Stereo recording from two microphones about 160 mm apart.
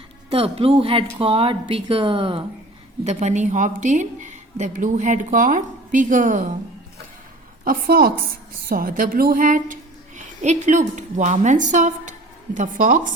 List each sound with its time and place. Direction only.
0.3 s speech: 40° right (ahead or behind)
3.0 s a woman's voice: 45° right (ahead or behind)
7.6 s a woman's voice: 65° right (ahead or behind)